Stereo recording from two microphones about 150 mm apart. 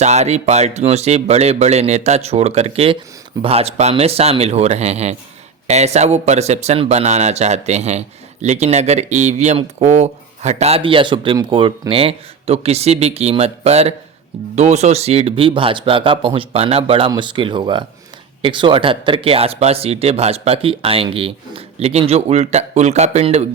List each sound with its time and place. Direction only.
0.0 s speech: 50° right (ahead or behind)